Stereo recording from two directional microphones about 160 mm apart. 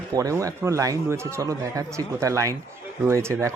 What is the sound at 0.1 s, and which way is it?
A man's voice, 20° right (ahead or behind).